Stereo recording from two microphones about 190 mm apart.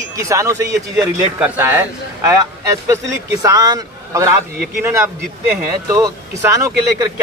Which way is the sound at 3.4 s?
20° right (ahead or behind).